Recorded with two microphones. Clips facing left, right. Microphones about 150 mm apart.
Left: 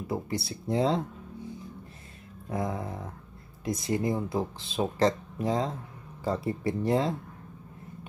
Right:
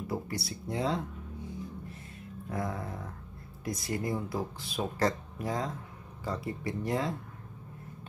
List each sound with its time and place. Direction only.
0.0 s speech: 20° left (ahead or behind)
2.5 s speech: 20° left (ahead or behind)